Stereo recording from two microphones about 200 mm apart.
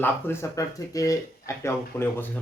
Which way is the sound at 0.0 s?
15° left (ahead or behind).